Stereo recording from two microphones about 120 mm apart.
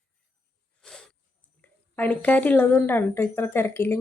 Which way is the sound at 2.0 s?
15° left (ahead or behind).